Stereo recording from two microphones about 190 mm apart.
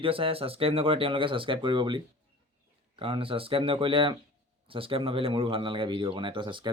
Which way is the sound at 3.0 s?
30° right (ahead or behind).